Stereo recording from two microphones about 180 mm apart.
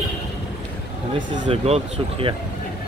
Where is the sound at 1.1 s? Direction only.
25° right (ahead or behind).